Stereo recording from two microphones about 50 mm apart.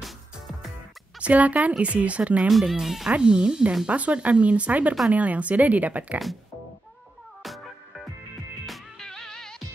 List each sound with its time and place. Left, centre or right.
1.2 s speech: right
2.5 s speech: centre
3.1 s speech: centre
7.4 s music: centre
9.0 s music: centre